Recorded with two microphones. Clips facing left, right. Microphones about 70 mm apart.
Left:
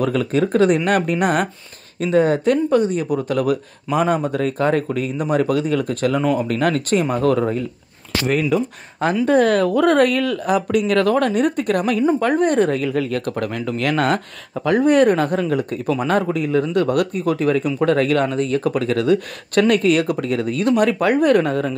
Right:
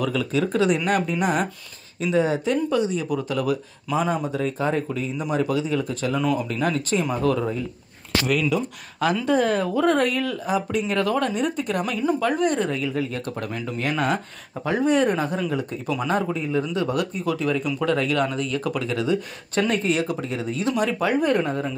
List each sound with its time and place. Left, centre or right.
0.0 s speech: left
8.3 s speech: left
9.2 s speech: left
14.9 s speech: left